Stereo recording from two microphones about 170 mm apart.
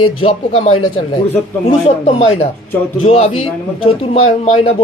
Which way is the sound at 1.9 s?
35° left (ahead or behind).